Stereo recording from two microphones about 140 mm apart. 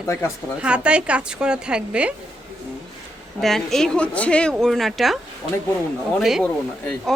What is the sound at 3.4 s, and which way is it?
A woman's voice, centre (ahead or behind).